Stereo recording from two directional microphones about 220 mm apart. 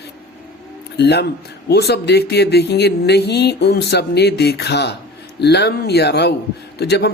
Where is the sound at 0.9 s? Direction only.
50° left (ahead or behind).